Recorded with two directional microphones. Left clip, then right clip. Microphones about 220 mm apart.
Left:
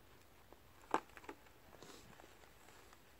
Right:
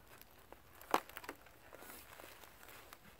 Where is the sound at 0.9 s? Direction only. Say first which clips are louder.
Right 3 dB; 40° right (ahead or behind).